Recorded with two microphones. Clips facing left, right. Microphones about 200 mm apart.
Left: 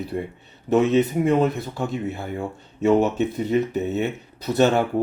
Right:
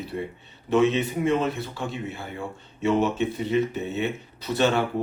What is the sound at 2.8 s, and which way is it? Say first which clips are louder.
Speech: left 4 dB; 40° left (ahead or behind).